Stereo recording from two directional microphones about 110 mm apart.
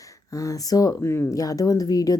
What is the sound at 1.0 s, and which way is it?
Speech, 25° left (ahead or behind).